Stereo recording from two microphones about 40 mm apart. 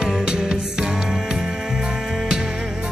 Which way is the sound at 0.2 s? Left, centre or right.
Centre.